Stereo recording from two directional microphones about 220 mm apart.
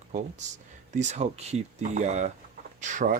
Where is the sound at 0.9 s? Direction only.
30° right (ahead or behind).